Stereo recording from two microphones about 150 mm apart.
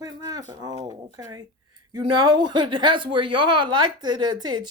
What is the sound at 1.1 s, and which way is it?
Speech, 25° right (ahead or behind).